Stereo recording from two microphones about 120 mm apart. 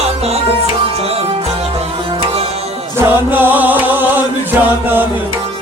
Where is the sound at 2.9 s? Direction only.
15° right (ahead or behind).